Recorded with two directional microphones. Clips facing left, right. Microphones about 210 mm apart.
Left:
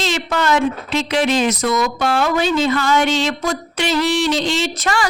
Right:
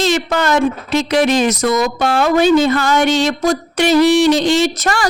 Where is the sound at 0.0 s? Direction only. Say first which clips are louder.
Right 4 dB; 45° right (ahead or behind).